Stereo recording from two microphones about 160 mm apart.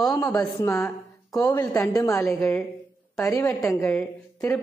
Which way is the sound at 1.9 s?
20° left (ahead or behind).